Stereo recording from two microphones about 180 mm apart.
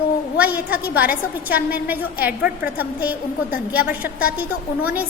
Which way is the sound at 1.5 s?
10° right (ahead or behind).